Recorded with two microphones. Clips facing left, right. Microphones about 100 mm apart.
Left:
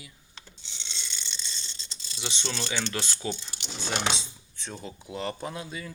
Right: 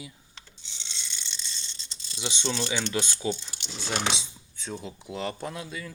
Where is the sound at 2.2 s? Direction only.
15° right (ahead or behind).